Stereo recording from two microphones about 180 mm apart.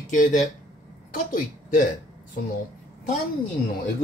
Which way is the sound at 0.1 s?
45° left (ahead or behind).